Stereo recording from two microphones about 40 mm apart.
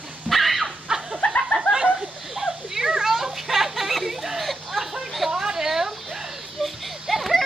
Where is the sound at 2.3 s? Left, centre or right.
Centre.